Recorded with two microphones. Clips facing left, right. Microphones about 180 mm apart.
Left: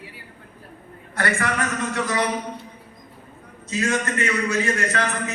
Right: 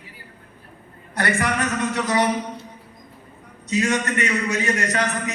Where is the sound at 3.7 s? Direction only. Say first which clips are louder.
Right 2 dB; 20° right (ahead or behind).